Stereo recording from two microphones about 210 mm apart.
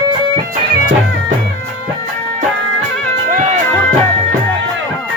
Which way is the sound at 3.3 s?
40° right (ahead or behind).